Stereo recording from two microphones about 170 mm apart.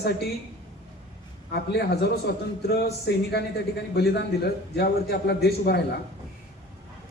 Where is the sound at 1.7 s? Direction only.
70° left (ahead or behind).